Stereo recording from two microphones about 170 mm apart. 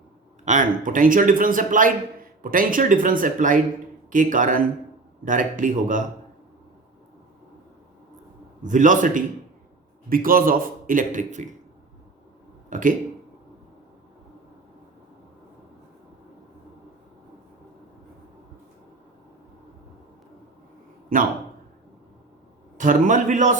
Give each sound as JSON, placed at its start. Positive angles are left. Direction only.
{"t": 0.4, "sound": "speech", "side_deg": -50}
{"t": 8.6, "sound": "speech", "side_deg": -50}
{"t": 12.7, "sound": "speech", "side_deg": -50}
{"t": 21.1, "sound": "speech", "side_deg": -55}
{"t": 22.8, "sound": "speech", "side_deg": -50}